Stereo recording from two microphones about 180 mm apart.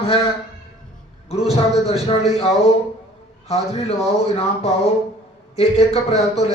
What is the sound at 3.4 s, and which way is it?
Speech, 35° left (ahead or behind).